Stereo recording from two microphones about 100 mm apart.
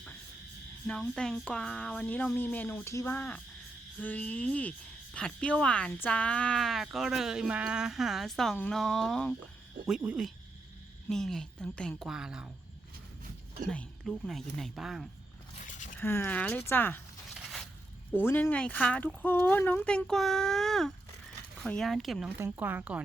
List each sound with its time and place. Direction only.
0.9 s speech: 5° left (ahead or behind)
2.9 s speech: 30° left (ahead or behind)
3.2 s a woman's voice: 20° left (ahead or behind)
10.0 s speech: 10° right (ahead or behind)
11.1 s a woman's voice: 5° left (ahead or behind)
12.0 s speech: 5° right (ahead or behind)
13.7 s a woman's voice: 5° left (ahead or behind)
16.0 s speech: 20° left (ahead or behind)
17.3 s scrape: 5° left (ahead or behind)
18.1 s speech: 20° left (ahead or behind)
20.1 s a woman's voice: 5° left (ahead or behind)
22.4 s speech: 20° right (ahead or behind)